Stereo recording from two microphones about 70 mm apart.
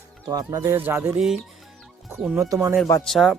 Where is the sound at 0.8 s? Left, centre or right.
Right.